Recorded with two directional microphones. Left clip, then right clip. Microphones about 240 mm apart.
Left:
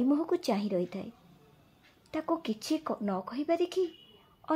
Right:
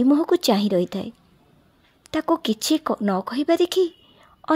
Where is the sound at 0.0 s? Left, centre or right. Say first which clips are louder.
Right 11 dB; right.